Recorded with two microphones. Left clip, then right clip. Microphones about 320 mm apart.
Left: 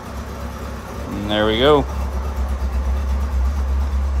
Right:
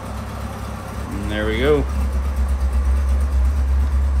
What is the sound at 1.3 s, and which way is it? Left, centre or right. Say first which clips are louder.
Speech: left 4 dB; centre.